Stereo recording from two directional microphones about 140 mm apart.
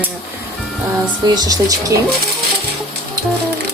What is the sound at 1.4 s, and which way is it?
Speech, 25° right (ahead or behind).